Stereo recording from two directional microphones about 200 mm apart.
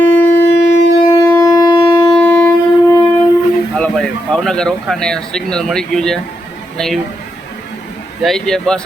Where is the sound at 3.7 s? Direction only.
5° left (ahead or behind).